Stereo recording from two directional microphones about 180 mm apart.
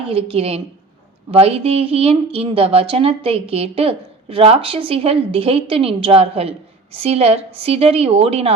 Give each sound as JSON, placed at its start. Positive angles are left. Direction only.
{"t": 0.1, "sound": "speech", "side_deg": -30}